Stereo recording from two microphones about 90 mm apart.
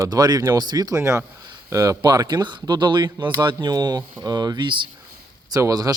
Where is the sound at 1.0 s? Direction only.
30° right (ahead or behind); by 4.8 s 60° right (ahead or behind).